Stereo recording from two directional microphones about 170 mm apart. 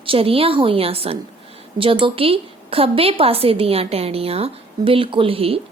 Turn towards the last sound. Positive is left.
turn(degrees=-35)  # may be behind; listen again after turning